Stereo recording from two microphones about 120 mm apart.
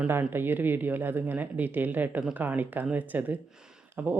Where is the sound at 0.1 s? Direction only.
20° right (ahead or behind).